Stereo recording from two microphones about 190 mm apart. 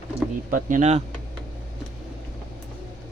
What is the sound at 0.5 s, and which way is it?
Speech, 40° right (ahead or behind).